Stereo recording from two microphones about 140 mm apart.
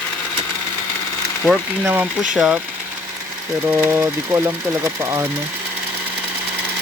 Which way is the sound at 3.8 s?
15° right (ahead or behind).